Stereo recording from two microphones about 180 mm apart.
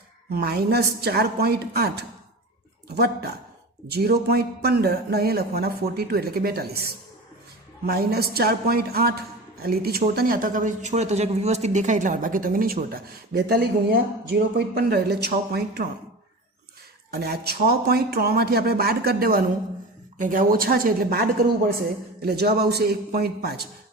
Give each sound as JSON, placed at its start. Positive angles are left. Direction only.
{"t": 0.3, "sound": "speech", "side_deg": -60}
{"t": 17.1, "sound": "speech", "side_deg": -60}